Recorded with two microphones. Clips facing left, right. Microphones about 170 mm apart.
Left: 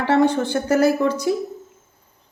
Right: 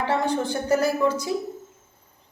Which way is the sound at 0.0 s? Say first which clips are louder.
Left 6 dB; 75° left (ahead or behind).